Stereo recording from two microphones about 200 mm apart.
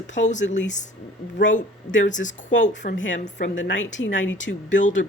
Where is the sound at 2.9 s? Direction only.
70° left (ahead or behind).